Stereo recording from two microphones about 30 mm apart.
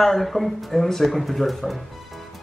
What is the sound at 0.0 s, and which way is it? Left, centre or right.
Speech, centre.